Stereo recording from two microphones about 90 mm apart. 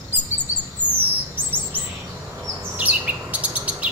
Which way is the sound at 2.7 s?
15° right (ahead or behind).